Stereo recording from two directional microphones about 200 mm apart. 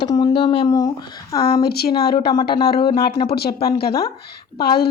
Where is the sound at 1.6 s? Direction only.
50° left (ahead or behind).